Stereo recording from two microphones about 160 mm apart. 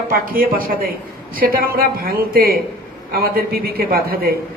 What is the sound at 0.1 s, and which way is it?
A woman's voice, 65° right (ahead or behind).